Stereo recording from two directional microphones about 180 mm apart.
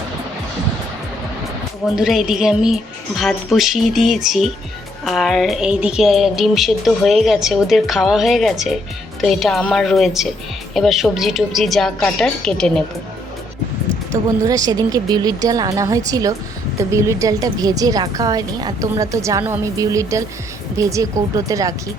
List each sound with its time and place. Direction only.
2.0 s speech: centre (ahead or behind)
14.1 s a woman's voice: 20° right (ahead or behind)